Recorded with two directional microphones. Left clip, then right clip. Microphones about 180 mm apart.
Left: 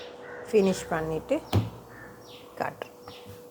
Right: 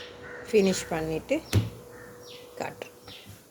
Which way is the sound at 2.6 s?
5° right (ahead or behind).